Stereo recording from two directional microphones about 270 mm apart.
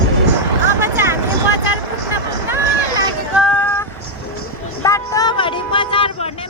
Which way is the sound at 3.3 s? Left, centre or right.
Centre.